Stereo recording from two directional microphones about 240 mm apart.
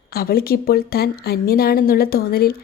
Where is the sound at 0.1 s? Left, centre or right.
Left.